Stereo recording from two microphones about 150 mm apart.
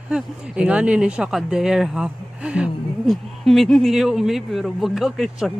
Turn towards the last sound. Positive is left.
turn(degrees=0)  # may be behind; listen again after turning